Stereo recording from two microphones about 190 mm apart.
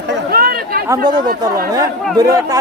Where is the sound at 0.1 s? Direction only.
55° right (ahead or behind).